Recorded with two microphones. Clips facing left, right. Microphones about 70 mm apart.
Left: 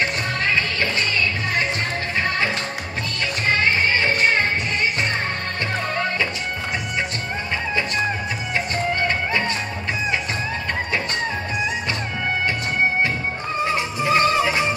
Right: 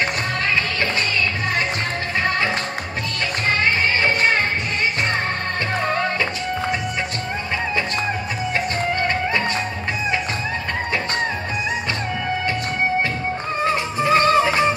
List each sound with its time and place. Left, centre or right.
13.9 s music: right